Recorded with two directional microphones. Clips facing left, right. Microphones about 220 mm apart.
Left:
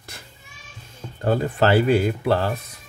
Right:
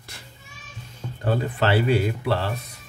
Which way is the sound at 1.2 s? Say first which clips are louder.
Left 4 dB; 45° left (ahead or behind).